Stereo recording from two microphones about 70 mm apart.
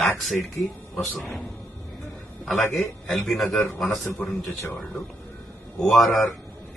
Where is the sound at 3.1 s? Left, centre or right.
Centre.